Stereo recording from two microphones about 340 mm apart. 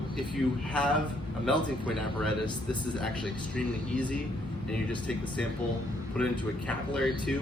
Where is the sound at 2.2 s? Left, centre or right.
Centre.